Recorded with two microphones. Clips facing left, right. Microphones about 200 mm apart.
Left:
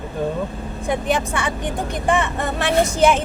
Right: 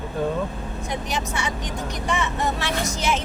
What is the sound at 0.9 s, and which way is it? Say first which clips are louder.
Speech: left 8 dB; 55° left (ahead or behind).